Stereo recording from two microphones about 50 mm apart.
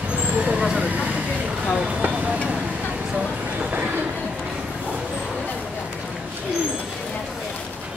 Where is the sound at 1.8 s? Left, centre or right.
Right.